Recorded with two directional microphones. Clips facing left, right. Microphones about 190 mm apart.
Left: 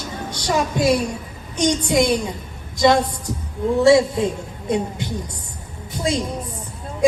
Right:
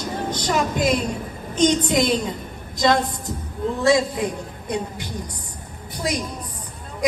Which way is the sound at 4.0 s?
25° left (ahead or behind).